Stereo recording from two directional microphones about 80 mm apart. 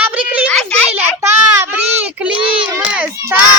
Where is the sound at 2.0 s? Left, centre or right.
Centre.